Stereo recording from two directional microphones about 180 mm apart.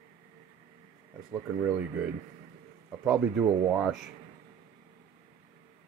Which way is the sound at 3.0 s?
5° right (ahead or behind).